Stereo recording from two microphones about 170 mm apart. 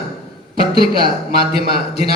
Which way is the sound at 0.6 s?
60° right (ahead or behind).